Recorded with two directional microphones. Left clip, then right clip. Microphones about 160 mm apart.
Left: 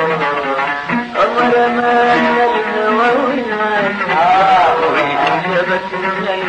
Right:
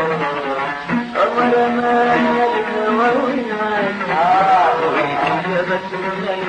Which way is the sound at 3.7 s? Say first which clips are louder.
Left 3 dB; 30° left (ahead or behind).